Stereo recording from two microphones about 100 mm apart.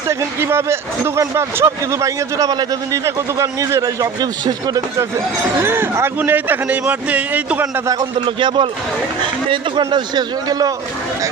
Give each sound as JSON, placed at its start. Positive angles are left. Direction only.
{"t": 0.1, "sound": "a man's voice", "side_deg": -25}
{"t": 5.6, "sound": "speech", "side_deg": -25}
{"t": 8.2, "sound": "a man's voice", "side_deg": -50}